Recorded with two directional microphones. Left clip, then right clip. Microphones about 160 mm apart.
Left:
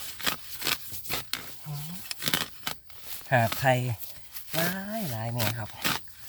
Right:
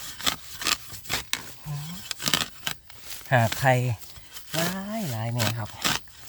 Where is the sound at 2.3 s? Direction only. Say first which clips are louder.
Right 4 dB; 40° right (ahead or behind).